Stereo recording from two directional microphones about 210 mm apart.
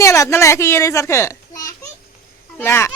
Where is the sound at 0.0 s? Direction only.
15° left (ahead or behind).